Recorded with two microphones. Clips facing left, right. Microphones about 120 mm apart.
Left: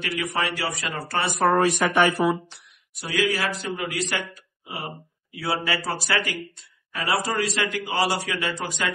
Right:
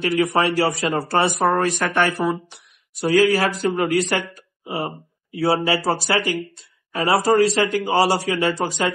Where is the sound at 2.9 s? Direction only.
45° right (ahead or behind).